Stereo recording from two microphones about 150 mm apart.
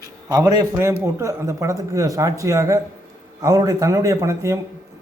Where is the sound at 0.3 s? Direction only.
25° right (ahead or behind).